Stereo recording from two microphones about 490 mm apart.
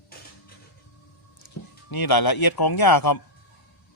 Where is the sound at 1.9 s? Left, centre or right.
Left.